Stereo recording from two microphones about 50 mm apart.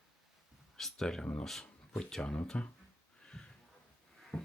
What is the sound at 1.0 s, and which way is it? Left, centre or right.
Speech, centre.